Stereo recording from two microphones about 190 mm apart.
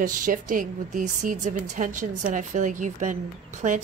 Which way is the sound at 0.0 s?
45° right (ahead or behind).